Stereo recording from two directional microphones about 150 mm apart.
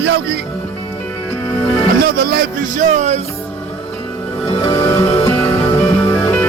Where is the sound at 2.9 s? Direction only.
50° right (ahead or behind).